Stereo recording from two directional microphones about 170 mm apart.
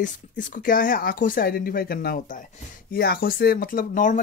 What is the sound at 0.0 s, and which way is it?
Speech, 50° left (ahead or behind).